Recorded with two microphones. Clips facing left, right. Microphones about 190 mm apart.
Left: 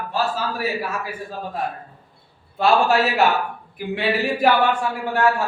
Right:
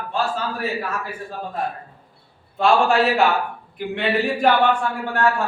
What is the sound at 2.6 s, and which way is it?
Speech, 5° left (ahead or behind).